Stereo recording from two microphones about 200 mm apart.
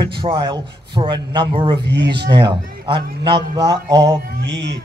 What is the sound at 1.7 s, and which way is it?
Speech, 60° right (ahead or behind).